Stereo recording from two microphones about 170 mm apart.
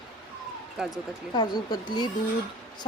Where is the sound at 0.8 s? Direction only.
Centre (ahead or behind).